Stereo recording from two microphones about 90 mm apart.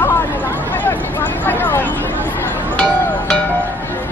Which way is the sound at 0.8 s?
20° left (ahead or behind).